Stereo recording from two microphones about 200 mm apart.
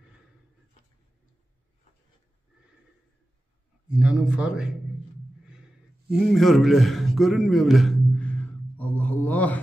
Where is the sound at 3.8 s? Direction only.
5° right (ahead or behind).